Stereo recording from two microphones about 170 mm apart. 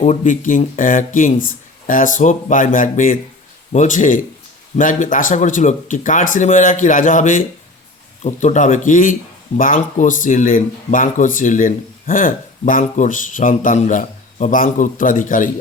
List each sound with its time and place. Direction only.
0.0 s speech: 45° left (ahead or behind)